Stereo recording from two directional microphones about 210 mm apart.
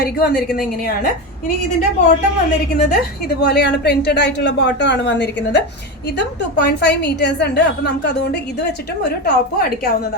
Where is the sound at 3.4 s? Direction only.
50° left (ahead or behind).